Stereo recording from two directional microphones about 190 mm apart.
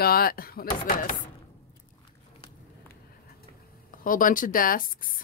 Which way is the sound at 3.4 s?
45° left (ahead or behind).